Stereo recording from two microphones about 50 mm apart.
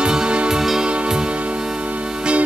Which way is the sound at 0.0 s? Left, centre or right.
Centre.